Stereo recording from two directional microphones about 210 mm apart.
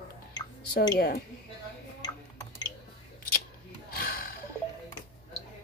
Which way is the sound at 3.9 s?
45° left (ahead or behind).